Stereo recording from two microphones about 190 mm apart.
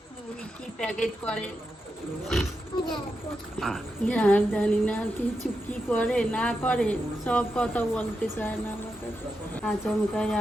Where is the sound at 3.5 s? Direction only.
Centre (ahead or behind).